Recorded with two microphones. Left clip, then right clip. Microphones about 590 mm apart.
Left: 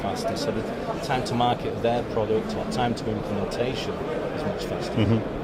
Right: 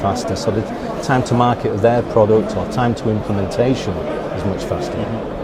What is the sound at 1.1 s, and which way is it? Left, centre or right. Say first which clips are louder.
Speech: right 8 dB; right.